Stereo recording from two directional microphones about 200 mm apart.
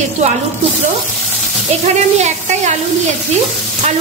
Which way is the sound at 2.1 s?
35° right (ahead or behind).